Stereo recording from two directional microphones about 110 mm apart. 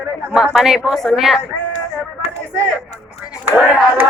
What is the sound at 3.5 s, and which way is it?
Speech, 15° right (ahead or behind).